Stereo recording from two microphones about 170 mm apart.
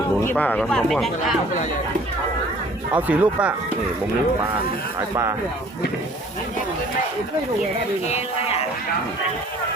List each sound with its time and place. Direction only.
0.3 s speech: 10° left (ahead or behind)
2.9 s speech: 10° right (ahead or behind)
8.0 s speech: 40° left (ahead or behind)